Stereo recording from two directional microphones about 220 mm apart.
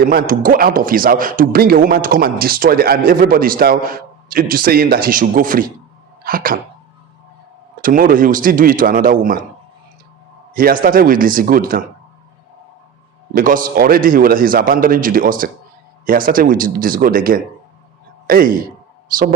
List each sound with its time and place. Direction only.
0.0 s a man's voice: 40° right (ahead or behind)
7.8 s a man's voice: 40° right (ahead or behind)
10.5 s a man's voice: 40° right (ahead or behind)
13.3 s a man's voice: 40° right (ahead or behind)